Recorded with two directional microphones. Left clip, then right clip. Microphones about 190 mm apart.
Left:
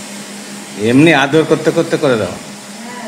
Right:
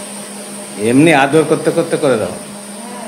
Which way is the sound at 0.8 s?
15° right (ahead or behind).